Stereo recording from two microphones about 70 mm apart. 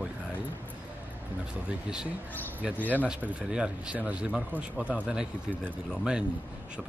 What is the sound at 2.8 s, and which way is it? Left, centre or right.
Speech, left.